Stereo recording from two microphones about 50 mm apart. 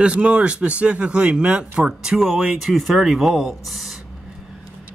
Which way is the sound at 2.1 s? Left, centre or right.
Centre.